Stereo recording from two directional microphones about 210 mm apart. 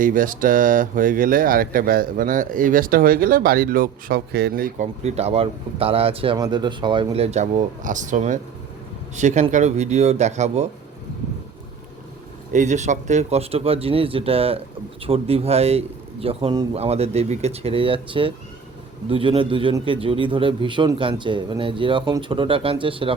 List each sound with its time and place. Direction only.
0.0 s speech: 40° right (ahead or behind)
12.5 s a man's voice: 35° right (ahead or behind)